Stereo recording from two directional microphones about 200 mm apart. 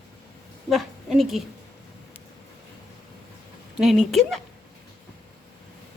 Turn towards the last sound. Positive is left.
turn(degrees=0)  # may be behind; listen again after turning